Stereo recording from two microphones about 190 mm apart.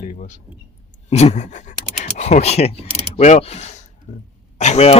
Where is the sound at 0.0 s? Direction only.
40° left (ahead or behind).